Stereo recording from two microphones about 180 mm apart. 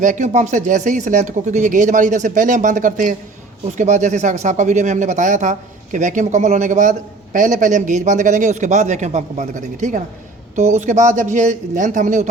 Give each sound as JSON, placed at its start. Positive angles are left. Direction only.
{"t": 0.0, "sound": "speech", "side_deg": -45}